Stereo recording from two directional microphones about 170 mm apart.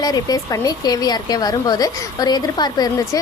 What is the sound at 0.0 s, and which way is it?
A woman's voice, 20° left (ahead or behind).